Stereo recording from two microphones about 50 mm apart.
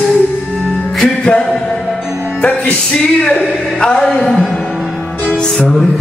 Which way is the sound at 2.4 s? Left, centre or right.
Left.